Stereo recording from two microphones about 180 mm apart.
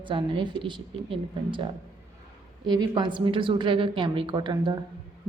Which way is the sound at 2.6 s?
25° right (ahead or behind).